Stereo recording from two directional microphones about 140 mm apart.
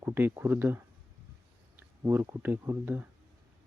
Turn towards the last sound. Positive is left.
turn(degrees=-15)  # may be behind; listen again after turning